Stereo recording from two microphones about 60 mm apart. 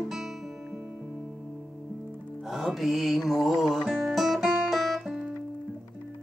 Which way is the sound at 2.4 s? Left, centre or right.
Centre.